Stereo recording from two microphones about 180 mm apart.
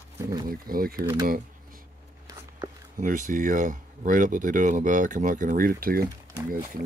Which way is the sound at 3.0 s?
45° right (ahead or behind).